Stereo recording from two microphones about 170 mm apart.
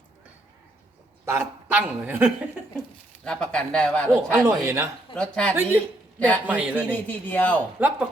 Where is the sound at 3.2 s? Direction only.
5° left (ahead or behind).